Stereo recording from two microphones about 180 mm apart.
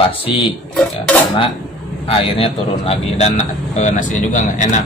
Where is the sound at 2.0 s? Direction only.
30° left (ahead or behind).